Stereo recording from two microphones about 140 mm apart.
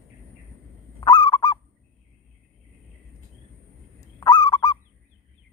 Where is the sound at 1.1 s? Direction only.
35° left (ahead or behind).